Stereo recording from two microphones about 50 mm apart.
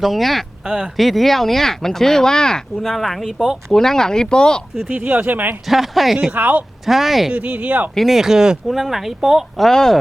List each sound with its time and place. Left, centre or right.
0.0 s speech: centre
2.8 s speech: centre
3.2 s speech: centre
3.7 s speech: centre
4.9 s speech: right
5.6 s speech: centre
6.3 s speech: right
6.8 s speech: centre
7.3 s speech: right
7.9 s speech: centre
8.6 s speech: centre